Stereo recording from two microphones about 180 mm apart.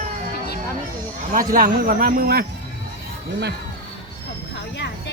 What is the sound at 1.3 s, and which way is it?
Speech, 50° right (ahead or behind).